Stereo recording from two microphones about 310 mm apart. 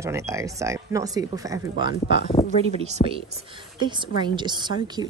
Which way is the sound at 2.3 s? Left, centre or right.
Left.